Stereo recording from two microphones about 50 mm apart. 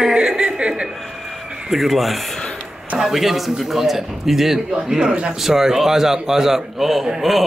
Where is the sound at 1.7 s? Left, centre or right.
Centre.